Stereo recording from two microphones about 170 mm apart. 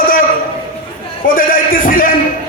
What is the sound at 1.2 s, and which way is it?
Speech, 55° left (ahead or behind).